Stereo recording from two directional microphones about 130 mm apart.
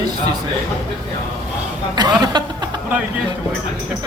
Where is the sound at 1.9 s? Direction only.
30° right (ahead or behind).